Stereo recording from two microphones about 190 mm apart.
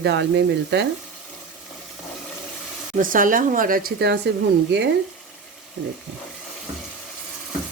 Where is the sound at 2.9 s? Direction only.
45° right (ahead or behind); by 4.3 s 60° right (ahead or behind).